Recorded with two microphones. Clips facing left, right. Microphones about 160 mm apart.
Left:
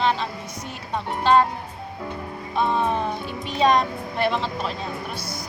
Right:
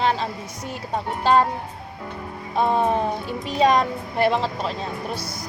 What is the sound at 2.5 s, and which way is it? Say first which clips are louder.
Speech: right 2 dB; 40° right (ahead or behind).